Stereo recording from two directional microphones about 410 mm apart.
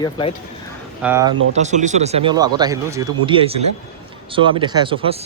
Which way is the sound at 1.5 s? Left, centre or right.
Centre.